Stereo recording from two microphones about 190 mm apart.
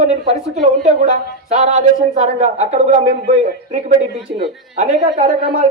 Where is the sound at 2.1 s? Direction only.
35° right (ahead or behind).